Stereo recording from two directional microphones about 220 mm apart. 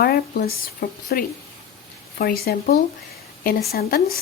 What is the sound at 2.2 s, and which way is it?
A woman's voice, 45° left (ahead or behind).